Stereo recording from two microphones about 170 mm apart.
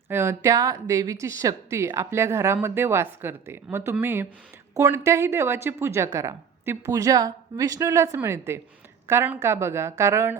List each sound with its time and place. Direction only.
0.1 s a woman's voice: 15° right (ahead or behind)